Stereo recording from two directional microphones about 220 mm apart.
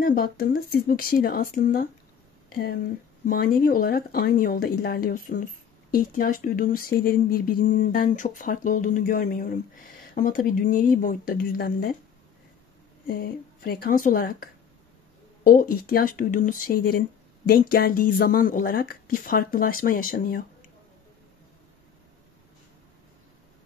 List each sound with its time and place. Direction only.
0.0 s speech: 40° left (ahead or behind)
13.0 s speech: 45° left (ahead or behind)